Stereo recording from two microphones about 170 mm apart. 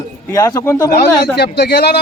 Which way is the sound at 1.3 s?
75° left (ahead or behind).